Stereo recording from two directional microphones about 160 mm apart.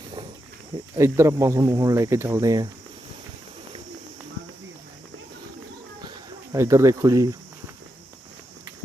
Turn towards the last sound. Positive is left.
turn(degrees=-20)  # may be behind; listen again after turning